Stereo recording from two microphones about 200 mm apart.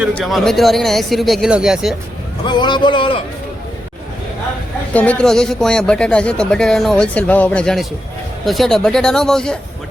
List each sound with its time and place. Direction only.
0.1 s speech: 5° left (ahead or behind)
2.4 s a man's voice: 20° left (ahead or behind)
4.9 s speech: 5° left (ahead or behind)